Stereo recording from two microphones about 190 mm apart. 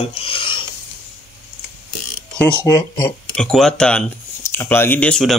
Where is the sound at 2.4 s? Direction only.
10° left (ahead or behind).